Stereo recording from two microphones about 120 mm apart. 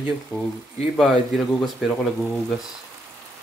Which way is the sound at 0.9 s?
Centre (ahead or behind).